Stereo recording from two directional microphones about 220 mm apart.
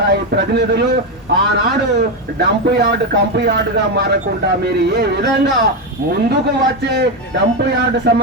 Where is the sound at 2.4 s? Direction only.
50° right (ahead or behind).